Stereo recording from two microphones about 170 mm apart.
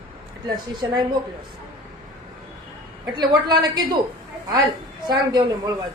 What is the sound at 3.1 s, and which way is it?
Speech, 25° right (ahead or behind).